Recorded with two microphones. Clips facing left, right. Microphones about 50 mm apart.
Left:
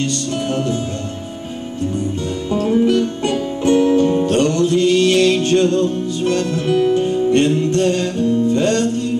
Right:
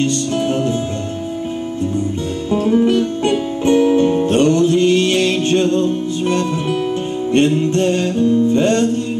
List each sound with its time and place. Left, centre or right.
0.0 s music: right
2.5 s music: centre
6.7 s music: centre
7.3 s music: right